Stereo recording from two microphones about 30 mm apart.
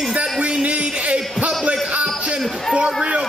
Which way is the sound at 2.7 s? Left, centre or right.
Right.